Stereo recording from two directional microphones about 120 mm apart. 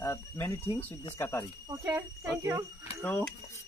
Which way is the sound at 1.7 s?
20° right (ahead or behind).